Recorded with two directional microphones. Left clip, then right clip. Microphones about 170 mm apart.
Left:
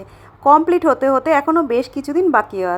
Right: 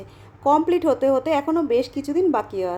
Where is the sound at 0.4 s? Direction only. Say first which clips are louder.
Left 6 dB; 20° left (ahead or behind).